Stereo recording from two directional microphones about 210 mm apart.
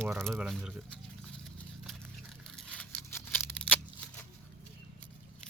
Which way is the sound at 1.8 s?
Centre (ahead or behind).